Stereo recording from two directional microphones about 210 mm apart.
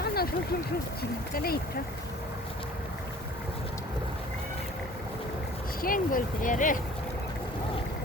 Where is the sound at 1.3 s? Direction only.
45° left (ahead or behind).